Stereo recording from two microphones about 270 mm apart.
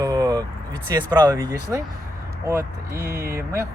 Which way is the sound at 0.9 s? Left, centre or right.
Centre.